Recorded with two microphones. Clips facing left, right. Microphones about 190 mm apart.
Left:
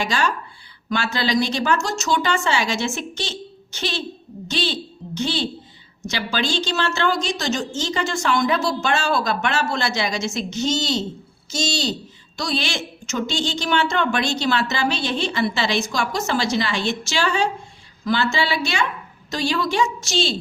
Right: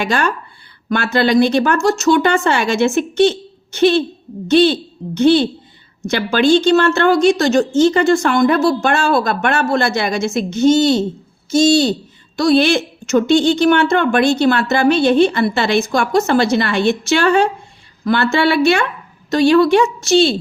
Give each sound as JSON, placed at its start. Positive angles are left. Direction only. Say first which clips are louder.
{"t": 0.0, "sound": "a woman's voice", "louder": "right 5 dB", "side_deg": -55}